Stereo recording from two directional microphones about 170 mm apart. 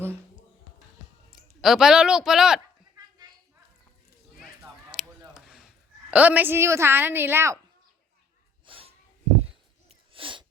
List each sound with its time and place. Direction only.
1.3 s speech: centre (ahead or behind)
5.3 s a woman's voice: 5° right (ahead or behind)
8.6 s a sound: 30° right (ahead or behind)
10.1 s sneeze: 30° right (ahead or behind)